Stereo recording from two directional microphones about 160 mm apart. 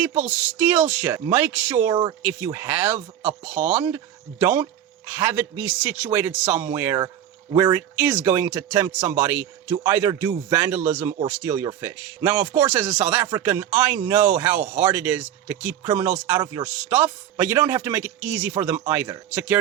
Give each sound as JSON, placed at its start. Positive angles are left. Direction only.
{"t": 0.0, "sound": "speech", "side_deg": -10}
{"t": 1.9, "sound": "speech", "side_deg": -25}
{"t": 2.2, "sound": "speech", "side_deg": -15}